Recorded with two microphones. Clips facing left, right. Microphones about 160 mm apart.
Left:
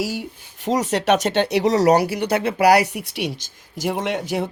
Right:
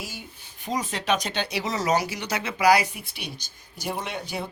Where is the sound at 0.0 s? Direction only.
80° left.